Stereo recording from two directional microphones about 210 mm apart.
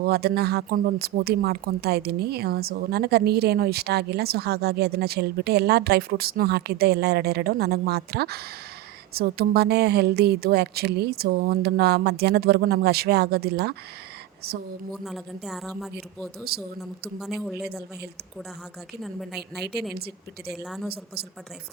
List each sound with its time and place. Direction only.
0.0 s speech: 50° right (ahead or behind)
15.0 s speech: centre (ahead or behind)
19.0 s speech: centre (ahead or behind)
20.5 s speech: centre (ahead or behind)